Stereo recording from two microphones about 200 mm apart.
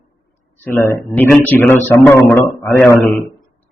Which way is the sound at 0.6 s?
10° left (ahead or behind).